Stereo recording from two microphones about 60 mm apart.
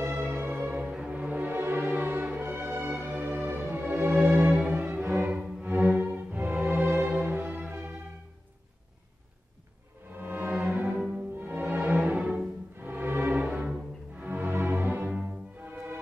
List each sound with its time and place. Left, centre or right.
0.1 s music: right
0.8 s music: centre; by 2.9 s right
3.0 s music: right
4.5 s music: centre
4.7 s music: right
10.1 s music: right